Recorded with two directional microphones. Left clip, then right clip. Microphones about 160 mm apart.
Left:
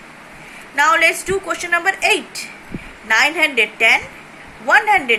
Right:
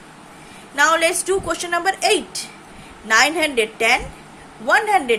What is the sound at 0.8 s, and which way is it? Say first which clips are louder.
A woman's voice: left 3 dB; 30° right (ahead or behind).